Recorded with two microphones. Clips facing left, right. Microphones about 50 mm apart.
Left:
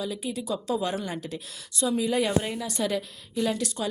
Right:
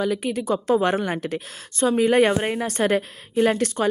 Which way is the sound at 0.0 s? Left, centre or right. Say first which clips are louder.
Right 8 dB; right.